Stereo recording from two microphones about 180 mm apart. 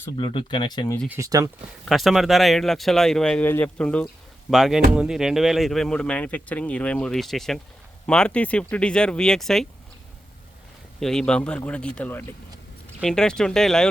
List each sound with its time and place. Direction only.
0.2 s speech: 30° left (ahead or behind)
1.0 s speech: 15° right (ahead or behind)
1.8 s speech: centre (ahead or behind)
11.0 s speech: 5° left (ahead or behind)